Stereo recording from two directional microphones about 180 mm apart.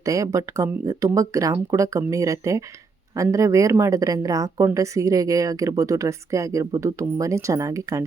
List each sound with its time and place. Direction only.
0.0 s a woman's voice: 20° right (ahead or behind)